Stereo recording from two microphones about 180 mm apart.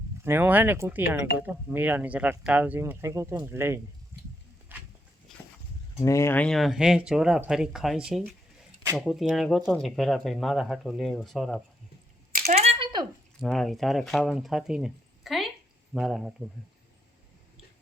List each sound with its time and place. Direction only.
0.3 s speech: 10° right (ahead or behind)
4.1 s a sound: 10° right (ahead or behind)
6.0 s speech: 15° left (ahead or behind); by 11.6 s centre (ahead or behind)
12.3 s typing: 40° right (ahead or behind)
13.4 s speech: centre (ahead or behind)